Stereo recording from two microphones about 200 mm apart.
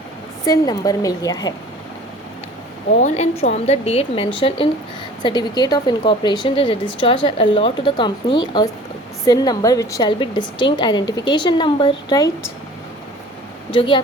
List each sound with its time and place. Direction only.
0.4 s a woman's voice: 20° left (ahead or behind)
3.0 s a woman's voice: 35° left (ahead or behind)
13.7 s speech: 25° left (ahead or behind)